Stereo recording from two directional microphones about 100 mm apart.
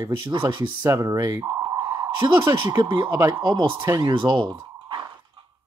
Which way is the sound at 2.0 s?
50° right (ahead or behind).